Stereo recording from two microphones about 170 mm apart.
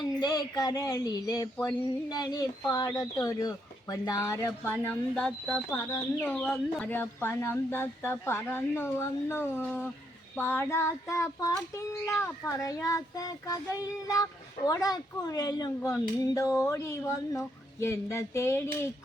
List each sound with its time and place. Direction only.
0.0 s speech: 25° left (ahead or behind)